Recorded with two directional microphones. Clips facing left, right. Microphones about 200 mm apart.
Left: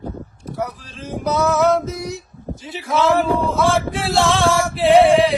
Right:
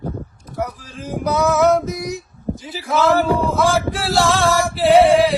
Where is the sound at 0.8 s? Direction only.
10° right (ahead or behind).